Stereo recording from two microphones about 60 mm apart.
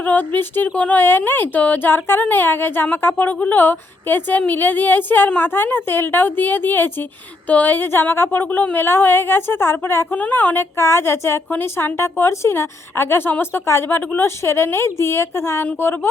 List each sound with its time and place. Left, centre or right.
0.0 s a woman's voice: left
1.0 s a woman's voice: left
10.8 s a woman's voice: left